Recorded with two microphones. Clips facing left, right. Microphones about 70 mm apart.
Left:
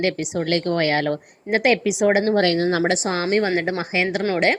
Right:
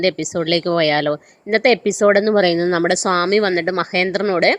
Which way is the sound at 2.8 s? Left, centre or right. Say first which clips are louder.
Right 5 dB; right.